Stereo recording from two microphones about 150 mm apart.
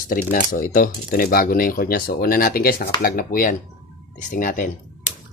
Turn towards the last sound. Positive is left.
turn(degrees=60)  # may be behind; listen again after turning